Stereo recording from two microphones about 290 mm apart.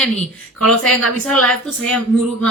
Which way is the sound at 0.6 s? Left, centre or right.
Centre.